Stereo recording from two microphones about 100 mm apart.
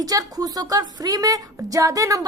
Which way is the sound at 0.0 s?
40° right (ahead or behind).